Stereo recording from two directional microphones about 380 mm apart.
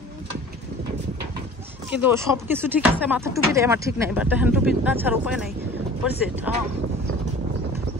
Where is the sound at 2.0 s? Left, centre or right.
Centre.